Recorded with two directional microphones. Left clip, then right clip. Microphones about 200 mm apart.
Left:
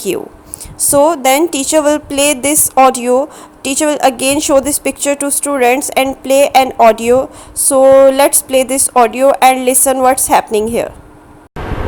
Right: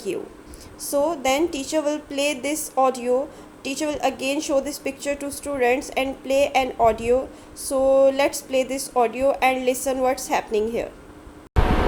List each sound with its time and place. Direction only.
0.9 s a woman's voice: 40° left (ahead or behind)